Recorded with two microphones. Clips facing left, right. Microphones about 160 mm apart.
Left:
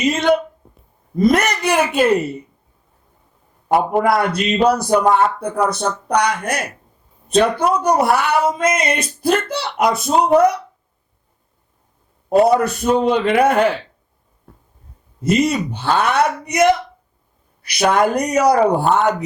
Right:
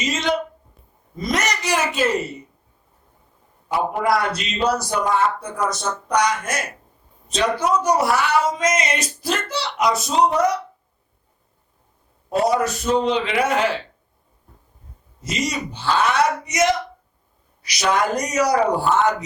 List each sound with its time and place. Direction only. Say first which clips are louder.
0.0 s a sound: left 7 dB; 55° left (ahead or behind)
1.1 s speech: left 8 dB; 55° left (ahead or behind)
3.7 s speech: left 5 dB; 55° left (ahead or behind)
12.3 s speech: left 6 dB; 55° left (ahead or behind)
15.2 s speech: left 9 dB; 55° left (ahead or behind)